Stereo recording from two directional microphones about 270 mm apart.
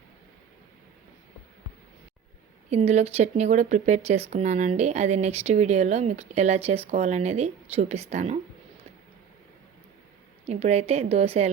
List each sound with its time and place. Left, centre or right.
2.6 s speech: right
10.4 s speech: right